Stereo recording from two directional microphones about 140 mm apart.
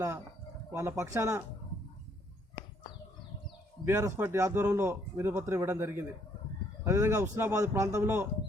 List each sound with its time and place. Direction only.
0.7 s a man's voice: 20° right (ahead or behind)
3.8 s a man's voice: 15° right (ahead or behind)